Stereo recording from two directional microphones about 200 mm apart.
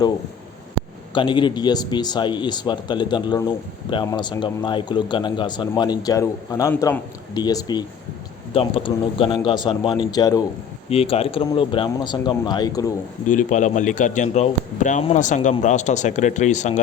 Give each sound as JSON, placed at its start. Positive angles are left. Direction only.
{"t": 1.1, "sound": "speech", "side_deg": 25}
{"t": 10.8, "sound": "speech", "side_deg": 30}
{"t": 13.2, "sound": "speech", "side_deg": 40}